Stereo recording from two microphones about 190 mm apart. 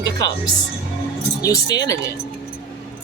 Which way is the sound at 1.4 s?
20° left (ahead or behind).